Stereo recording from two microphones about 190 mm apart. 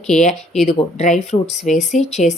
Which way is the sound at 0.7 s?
35° left (ahead or behind).